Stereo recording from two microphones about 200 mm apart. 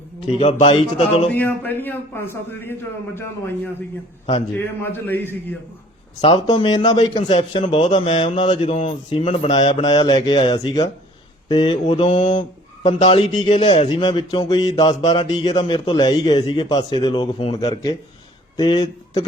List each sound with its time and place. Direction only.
0.6 s speech: 30° left (ahead or behind)
1.3 s a man's voice: 10° left (ahead or behind)
6.2 s speech: 25° left (ahead or behind)
12.3 s a sound: 25° left (ahead or behind)
13.0 s speech: 25° left (ahead or behind)